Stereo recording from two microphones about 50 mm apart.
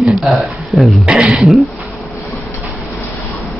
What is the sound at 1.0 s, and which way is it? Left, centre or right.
Speech, centre.